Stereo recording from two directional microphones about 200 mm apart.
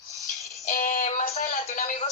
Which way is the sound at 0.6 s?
40° left (ahead or behind).